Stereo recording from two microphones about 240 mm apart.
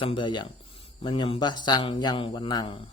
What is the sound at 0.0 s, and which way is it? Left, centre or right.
Speech, left.